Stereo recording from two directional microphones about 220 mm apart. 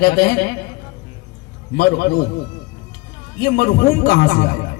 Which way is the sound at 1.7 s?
45° left (ahead or behind).